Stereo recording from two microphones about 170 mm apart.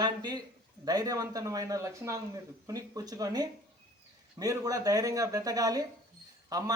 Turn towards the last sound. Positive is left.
turn(degrees=-20)  # may be behind; listen again after turning